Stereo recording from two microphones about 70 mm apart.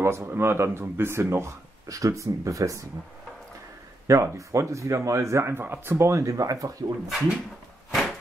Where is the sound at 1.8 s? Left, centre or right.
Right.